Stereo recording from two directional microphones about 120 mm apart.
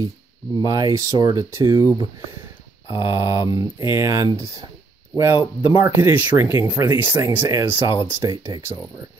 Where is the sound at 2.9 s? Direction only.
40° left (ahead or behind).